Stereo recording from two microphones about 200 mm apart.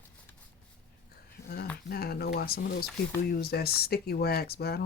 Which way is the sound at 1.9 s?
50° left (ahead or behind).